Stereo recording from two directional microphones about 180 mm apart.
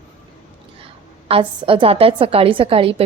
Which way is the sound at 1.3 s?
30° right (ahead or behind).